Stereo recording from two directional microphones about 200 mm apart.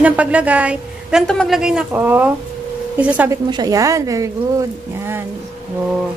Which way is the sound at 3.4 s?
20° right (ahead or behind).